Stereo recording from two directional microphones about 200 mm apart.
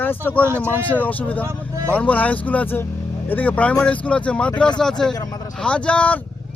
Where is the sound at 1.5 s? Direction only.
15° right (ahead or behind).